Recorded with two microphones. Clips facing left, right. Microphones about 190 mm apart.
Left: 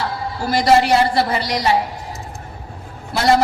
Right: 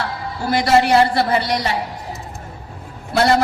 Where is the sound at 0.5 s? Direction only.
60° right (ahead or behind).